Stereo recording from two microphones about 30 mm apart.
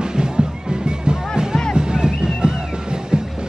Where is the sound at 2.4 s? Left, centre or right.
Right.